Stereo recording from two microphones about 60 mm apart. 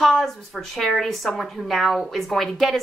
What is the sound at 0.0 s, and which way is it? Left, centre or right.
A woman's voice, centre.